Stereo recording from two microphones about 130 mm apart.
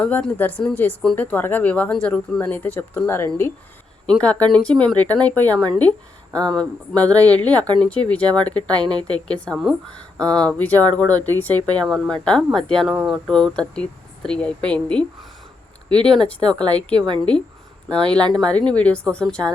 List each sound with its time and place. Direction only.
0.0 s speech: 10° left (ahead or behind)
7.1 s speech: 30° right (ahead or behind)
7.3 s speech: 10° left (ahead or behind)